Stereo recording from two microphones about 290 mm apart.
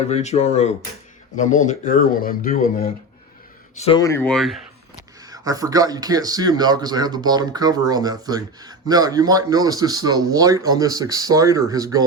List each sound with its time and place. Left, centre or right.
0.1 s speech: left
3.8 s speech: centre
5.3 s speech: centre